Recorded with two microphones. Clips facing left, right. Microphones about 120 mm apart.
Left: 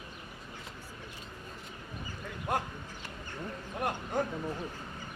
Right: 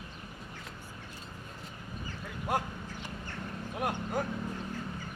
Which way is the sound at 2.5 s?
5° right (ahead or behind).